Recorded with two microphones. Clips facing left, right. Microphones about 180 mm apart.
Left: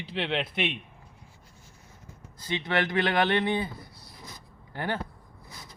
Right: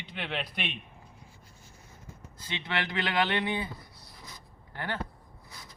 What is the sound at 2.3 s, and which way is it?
Speech, 45° left (ahead or behind).